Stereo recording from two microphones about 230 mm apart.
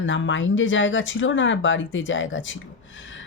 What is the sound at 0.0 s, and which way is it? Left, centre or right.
Speech, left.